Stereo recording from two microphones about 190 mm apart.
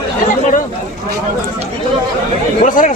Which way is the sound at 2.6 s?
45° left (ahead or behind).